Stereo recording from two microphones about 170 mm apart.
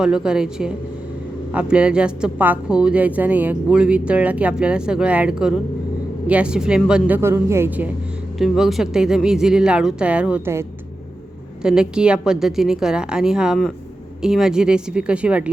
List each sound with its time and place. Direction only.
0.0 s speech: 5° right (ahead or behind)
8.4 s speech: centre (ahead or behind)